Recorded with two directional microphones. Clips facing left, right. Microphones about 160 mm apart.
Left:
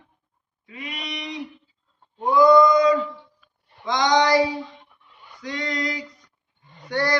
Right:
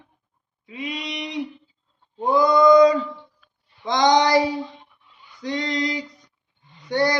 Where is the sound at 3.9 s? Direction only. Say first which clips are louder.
Right 2 dB; 25° right (ahead or behind).